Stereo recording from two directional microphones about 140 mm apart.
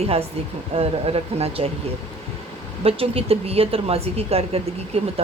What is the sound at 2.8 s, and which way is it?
Speech, 45° right (ahead or behind).